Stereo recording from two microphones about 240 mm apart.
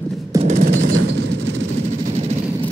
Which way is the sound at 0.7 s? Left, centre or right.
Right.